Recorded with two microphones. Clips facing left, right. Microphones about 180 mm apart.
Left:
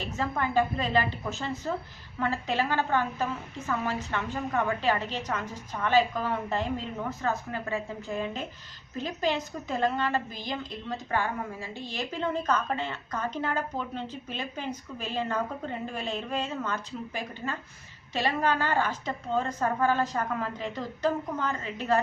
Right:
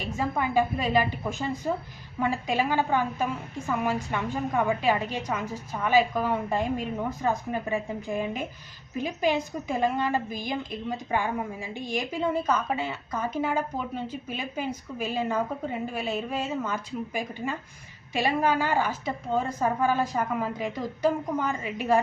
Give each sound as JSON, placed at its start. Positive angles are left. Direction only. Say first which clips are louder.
{"t": 0.0, "sound": "a woman's voice", "louder": "right 2 dB", "side_deg": -10}